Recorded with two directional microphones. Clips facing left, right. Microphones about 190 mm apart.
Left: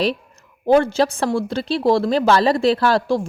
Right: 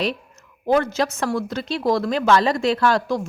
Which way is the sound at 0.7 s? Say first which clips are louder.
Left 4 dB; 30° left (ahead or behind).